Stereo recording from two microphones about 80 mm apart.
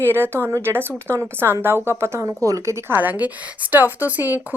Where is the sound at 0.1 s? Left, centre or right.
Right.